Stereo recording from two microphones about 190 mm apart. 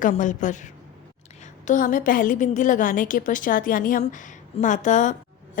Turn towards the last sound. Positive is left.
turn(degrees=40)  # may be behind; listen again after turning